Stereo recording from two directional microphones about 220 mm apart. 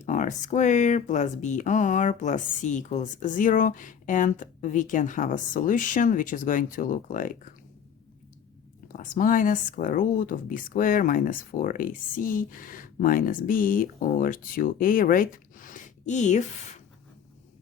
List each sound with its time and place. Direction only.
0.0 s speech: 35° left (ahead or behind)
8.9 s speech: 35° left (ahead or behind)